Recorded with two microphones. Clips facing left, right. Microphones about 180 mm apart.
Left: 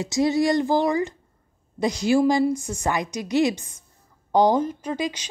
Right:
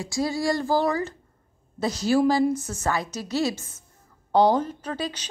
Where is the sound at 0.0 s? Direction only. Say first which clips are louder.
Left 5 dB; 20° left (ahead or behind).